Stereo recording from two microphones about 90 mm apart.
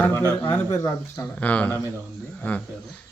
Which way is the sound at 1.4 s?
15° left (ahead or behind).